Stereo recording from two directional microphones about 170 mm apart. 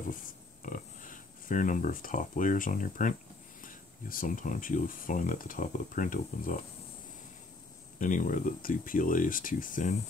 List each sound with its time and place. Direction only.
0.6 s speech: 50° left (ahead or behind)
8.0 s speech: 50° left (ahead or behind)